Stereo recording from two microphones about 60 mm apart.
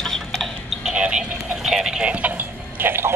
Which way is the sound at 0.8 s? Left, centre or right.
Centre.